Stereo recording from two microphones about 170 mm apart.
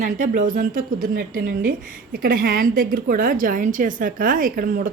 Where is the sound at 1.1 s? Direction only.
60° right (ahead or behind).